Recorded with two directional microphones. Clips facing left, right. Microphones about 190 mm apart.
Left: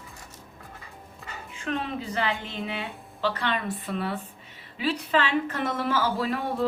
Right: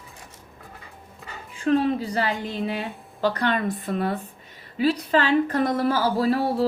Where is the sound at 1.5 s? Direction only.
35° right (ahead or behind).